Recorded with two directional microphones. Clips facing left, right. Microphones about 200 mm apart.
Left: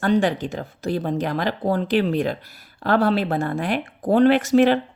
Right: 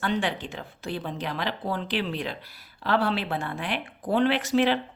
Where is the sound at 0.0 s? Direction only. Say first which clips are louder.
Left 8 dB; 40° left (ahead or behind).